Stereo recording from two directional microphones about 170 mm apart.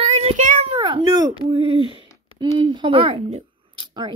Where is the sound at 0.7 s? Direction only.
30° right (ahead or behind).